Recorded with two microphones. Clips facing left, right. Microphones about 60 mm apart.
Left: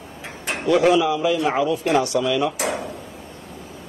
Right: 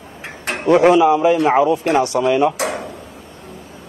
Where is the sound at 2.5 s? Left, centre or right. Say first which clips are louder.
Right 2 dB; right.